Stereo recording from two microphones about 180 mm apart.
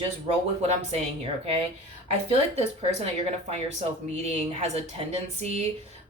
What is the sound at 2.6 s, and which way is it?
Speech, 35° right (ahead or behind).